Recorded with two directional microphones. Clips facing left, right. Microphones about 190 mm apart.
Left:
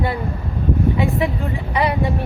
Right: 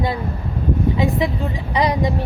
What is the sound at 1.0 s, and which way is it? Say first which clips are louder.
Speech: right 1 dB; 35° right (ahead or behind).